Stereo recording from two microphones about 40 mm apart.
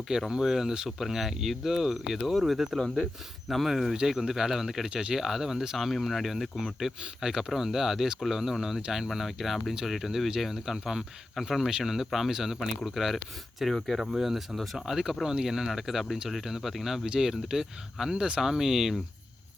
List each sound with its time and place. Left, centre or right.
0.3 s speech: centre
4.9 s speech: right
5.1 s speech: centre
14.0 s speech: centre
14.8 s speech: centre